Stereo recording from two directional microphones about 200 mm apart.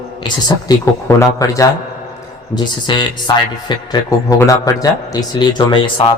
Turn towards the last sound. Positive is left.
turn(degrees=25)  # may be behind; listen again after turning